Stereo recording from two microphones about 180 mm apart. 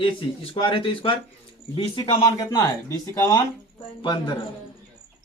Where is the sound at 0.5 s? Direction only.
30° left (ahead or behind).